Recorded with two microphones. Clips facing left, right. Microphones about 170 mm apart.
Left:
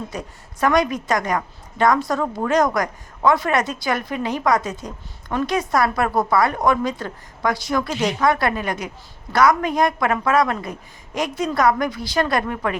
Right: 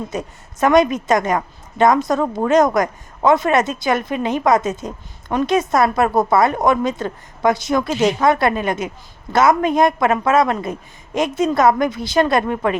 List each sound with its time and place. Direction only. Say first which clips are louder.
0.1 s a woman's voice: right 5 dB; 20° right (ahead or behind)